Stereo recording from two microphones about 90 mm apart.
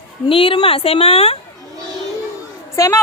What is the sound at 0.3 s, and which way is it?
A woman's voice, 80° left.